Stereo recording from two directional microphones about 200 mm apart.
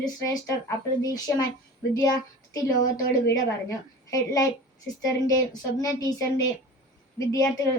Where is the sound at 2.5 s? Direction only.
15° left (ahead or behind).